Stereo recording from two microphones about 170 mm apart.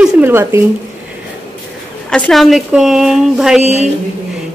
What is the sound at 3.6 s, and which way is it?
Speech, 40° right (ahead or behind).